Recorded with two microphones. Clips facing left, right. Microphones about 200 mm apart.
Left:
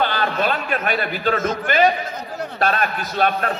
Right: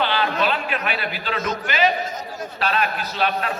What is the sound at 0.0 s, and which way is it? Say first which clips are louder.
A man's voice: left 1 dB; 45° left (ahead or behind).